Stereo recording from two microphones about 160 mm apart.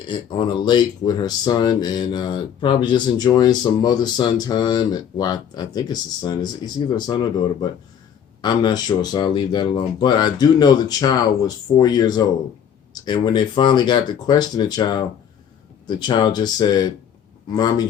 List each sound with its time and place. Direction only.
0.1 s speech: 30° left (ahead or behind)